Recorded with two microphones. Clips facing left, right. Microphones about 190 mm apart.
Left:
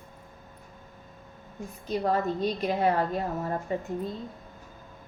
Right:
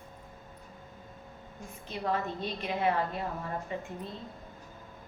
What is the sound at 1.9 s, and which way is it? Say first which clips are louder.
A woman's voice: left 6 dB; 40° left (ahead or behind).